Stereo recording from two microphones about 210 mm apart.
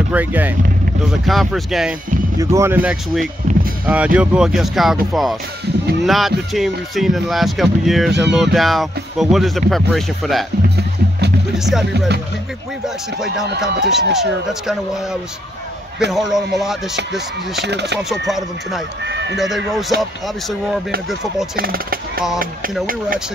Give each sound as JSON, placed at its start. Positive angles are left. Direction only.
{"t": 0.1, "sound": "speech", "side_deg": -10}
{"t": 2.3, "sound": "speech", "side_deg": -15}
{"t": 3.5, "sound": "music", "side_deg": -35}
{"t": 3.8, "sound": "speech", "side_deg": -5}
{"t": 8.1, "sound": "a sound", "side_deg": -55}
{"t": 8.4, "sound": "speech", "side_deg": 0}
{"t": 11.5, "sound": "speech", "side_deg": 0}
{"t": 12.8, "sound": "speech", "side_deg": 0}
{"t": 16.1, "sound": "speech", "side_deg": 0}
{"t": 17.6, "sound": "speech", "side_deg": -55}
{"t": 17.9, "sound": "speech", "side_deg": 0}
{"t": 21.5, "sound": "speech", "side_deg": -45}